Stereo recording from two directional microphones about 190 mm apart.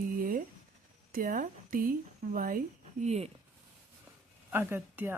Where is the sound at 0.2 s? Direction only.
45° right (ahead or behind).